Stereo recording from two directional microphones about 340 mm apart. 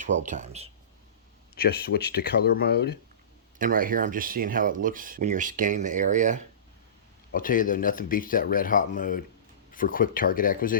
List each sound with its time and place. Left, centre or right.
0.0 s speech: right
1.5 s speech: left
3.6 s speech: right
7.3 s speech: left